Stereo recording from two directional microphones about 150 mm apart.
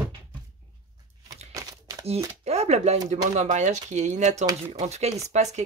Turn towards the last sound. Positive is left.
turn(degrees=-50)  # may be behind; listen again after turning